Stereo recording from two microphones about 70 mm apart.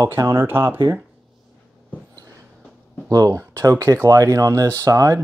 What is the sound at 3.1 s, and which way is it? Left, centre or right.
Speech, right.